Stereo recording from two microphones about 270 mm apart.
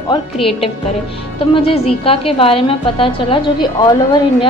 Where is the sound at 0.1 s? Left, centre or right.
Centre.